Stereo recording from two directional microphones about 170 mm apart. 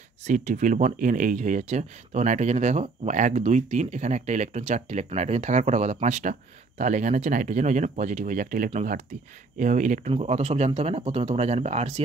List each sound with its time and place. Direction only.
0.2 s speech: 45° right (ahead or behind)